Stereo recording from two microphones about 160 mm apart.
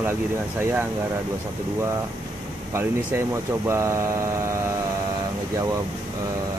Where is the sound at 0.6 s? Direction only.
15° right (ahead or behind).